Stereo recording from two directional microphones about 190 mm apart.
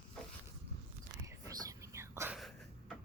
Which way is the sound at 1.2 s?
15° right (ahead or behind).